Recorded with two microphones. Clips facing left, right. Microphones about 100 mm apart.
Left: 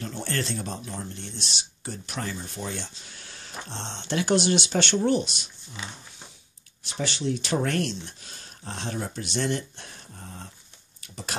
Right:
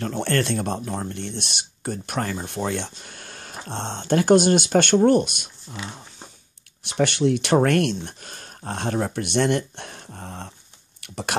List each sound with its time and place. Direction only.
0.0 s speech: 60° right (ahead or behind)
6.8 s speech: 65° right (ahead or behind)